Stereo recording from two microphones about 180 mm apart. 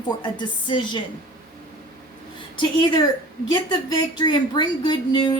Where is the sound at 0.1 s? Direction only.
25° left (ahead or behind).